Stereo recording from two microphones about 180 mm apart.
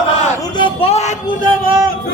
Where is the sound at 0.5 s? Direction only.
30° left (ahead or behind).